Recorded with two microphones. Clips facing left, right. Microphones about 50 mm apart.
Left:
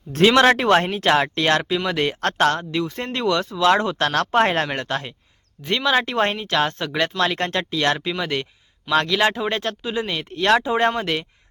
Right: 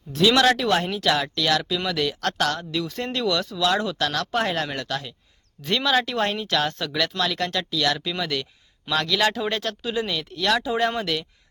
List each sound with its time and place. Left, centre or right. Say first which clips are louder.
0.1 s speech: left 4 dB; left
5.6 s speech: left 2 dB; left